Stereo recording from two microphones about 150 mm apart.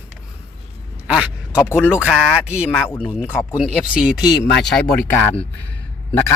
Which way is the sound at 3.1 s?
5° right (ahead or behind).